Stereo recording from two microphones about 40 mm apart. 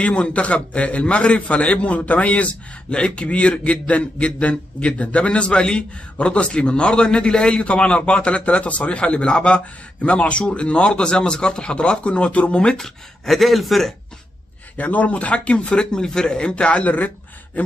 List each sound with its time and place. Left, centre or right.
0.0 s a man's voice: left
12.7 s speech: centre
14.8 s a man's voice: left